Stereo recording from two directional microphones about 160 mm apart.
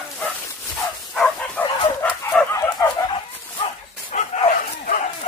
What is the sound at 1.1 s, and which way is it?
Dog, 5° left (ahead or behind).